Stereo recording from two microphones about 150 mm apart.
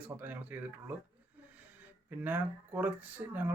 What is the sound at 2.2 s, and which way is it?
Speech, 10° right (ahead or behind).